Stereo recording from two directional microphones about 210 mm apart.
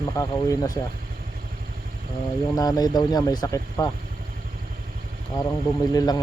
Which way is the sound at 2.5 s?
20° left (ahead or behind).